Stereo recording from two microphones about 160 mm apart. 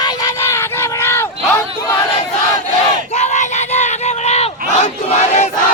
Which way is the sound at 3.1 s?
45° left (ahead or behind).